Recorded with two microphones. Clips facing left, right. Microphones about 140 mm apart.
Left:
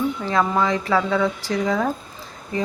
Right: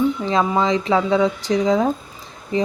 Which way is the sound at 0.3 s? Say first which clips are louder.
Right 2 dB; 20° right (ahead or behind).